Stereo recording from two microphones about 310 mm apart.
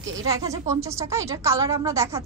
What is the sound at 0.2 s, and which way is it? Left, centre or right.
Speech, centre.